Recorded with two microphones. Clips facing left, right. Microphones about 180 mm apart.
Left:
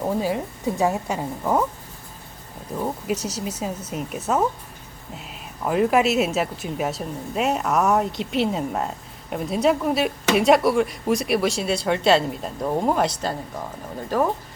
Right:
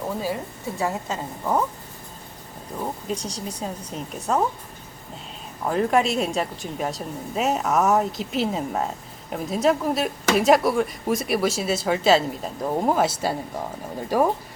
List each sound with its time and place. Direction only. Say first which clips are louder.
0.0 s a woman's voice: left 4 dB; 15° left (ahead or behind)
3.1 s a woman's voice: left 3 dB; 5° left (ahead or behind)
5.6 s speech: left 2 dB; 5° left (ahead or behind); by 14.3 s 10° right (ahead or behind)